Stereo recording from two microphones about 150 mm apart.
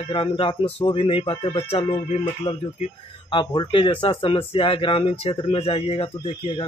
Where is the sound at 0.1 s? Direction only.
40° left (ahead or behind).